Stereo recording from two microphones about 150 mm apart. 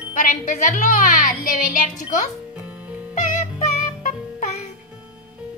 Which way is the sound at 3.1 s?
55° left (ahead or behind).